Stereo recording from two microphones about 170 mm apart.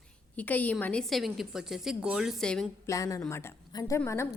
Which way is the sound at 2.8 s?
20° left (ahead or behind).